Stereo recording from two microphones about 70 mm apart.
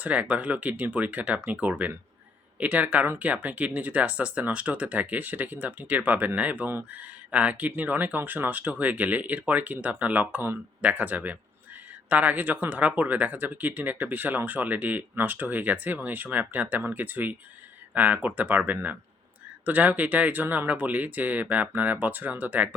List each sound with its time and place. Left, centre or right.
0.0 s speech: right